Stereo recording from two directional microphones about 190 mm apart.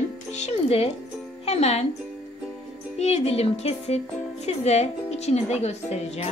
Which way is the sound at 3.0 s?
35° left (ahead or behind).